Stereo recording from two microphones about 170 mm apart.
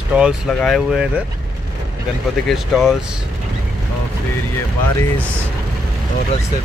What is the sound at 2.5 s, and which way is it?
Speech, centre (ahead or behind).